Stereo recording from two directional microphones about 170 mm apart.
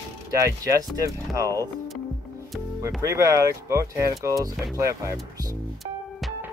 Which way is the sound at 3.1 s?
20° right (ahead or behind).